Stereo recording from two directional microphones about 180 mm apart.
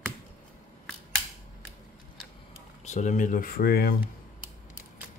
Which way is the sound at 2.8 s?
40° left (ahead or behind).